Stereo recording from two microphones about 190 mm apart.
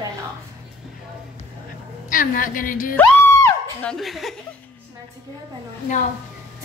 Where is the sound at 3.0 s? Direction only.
10° left (ahead or behind).